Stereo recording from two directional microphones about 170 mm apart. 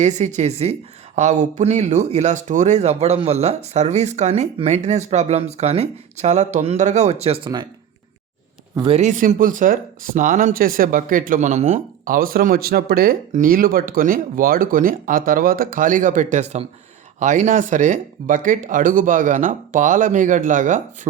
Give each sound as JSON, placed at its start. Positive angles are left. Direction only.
{"t": 0.0, "sound": "speech", "side_deg": -45}
{"t": 8.8, "sound": "speech", "side_deg": -40}
{"t": 12.0, "sound": "speech", "side_deg": -55}